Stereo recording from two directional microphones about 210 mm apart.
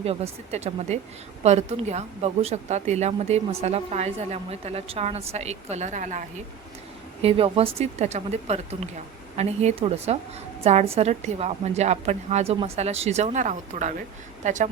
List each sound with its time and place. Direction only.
0.0 s a woman's voice: 30° right (ahead or behind)